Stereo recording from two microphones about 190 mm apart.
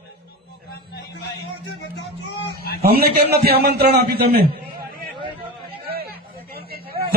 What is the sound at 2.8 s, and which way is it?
A man's voice, 55° right (ahead or behind).